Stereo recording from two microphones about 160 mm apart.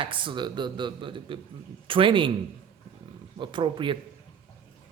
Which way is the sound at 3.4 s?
30° right (ahead or behind).